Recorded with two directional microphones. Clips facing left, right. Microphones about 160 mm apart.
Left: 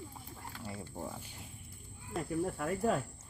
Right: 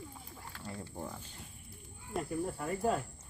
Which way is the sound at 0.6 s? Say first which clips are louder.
Even; 5° left (ahead or behind).